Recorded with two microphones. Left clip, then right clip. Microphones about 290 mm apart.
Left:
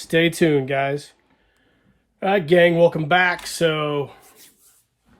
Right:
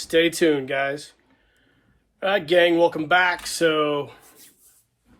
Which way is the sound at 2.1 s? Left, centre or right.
Left.